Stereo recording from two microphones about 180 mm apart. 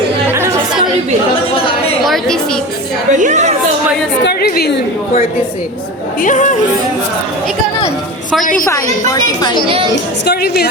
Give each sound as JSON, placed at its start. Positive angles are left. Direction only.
{"t": 2.0, "sound": "a woman's voice", "side_deg": 0}
{"t": 3.1, "sound": "a woman's voice", "side_deg": -45}
{"t": 4.2, "sound": "a woman's voice", "side_deg": 60}
{"t": 6.2, "sound": "speech", "side_deg": 45}
{"t": 8.6, "sound": "speech", "side_deg": 15}
{"t": 9.6, "sound": "a woman's voice", "side_deg": -30}
{"t": 10.2, "sound": "a woman's voice", "side_deg": 60}